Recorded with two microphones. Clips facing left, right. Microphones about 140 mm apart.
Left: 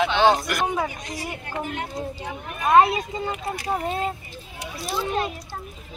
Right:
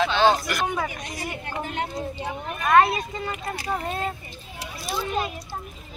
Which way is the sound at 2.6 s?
15° left (ahead or behind).